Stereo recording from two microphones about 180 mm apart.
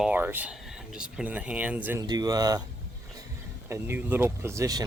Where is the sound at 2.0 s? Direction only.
20° right (ahead or behind).